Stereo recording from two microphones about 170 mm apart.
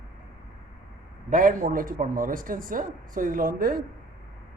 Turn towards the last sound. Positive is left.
turn(degrees=-60)  # may be behind; listen again after turning